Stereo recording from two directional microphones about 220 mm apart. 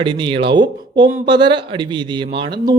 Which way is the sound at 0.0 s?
20° right (ahead or behind).